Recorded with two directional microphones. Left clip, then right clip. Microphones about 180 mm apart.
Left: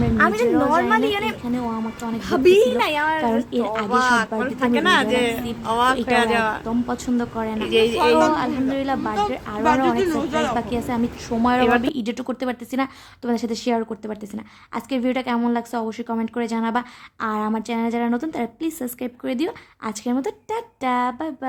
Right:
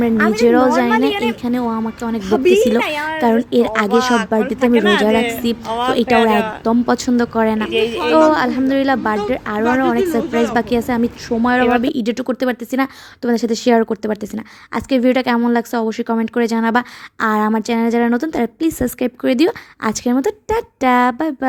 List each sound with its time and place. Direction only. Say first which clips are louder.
0.4 s a woman's voice: right 7 dB; 40° right (ahead or behind)
0.9 s a woman's voice: right 4 dB; 15° right (ahead or behind)
1.4 s a woman's voice: right 6 dB; 35° right (ahead or behind)
2.2 s a woman's voice: right 2 dB; 15° right (ahead or behind)
3.2 s a woman's voice: right 7 dB; 35° right (ahead or behind)
4.4 s speech: right 6 dB; 5° right (ahead or behind)
6.0 s a woman's voice: right 6 dB; 35° right (ahead or behind)
6.3 s speech: right 3 dB; centre (ahead or behind)
6.7 s a woman's voice: right 9 dB; 35° right (ahead or behind)
7.7 s speech: even; 5° left (ahead or behind)
8.3 s a woman's voice: right 6 dB; 30° right (ahead or behind)
10.0 s speech: right 4 dB; 10° left (ahead or behind)
10.5 s a woman's voice: right 7 dB; 35° right (ahead or behind)